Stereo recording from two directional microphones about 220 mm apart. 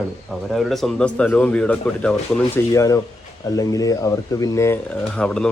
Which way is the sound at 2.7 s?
15° left (ahead or behind).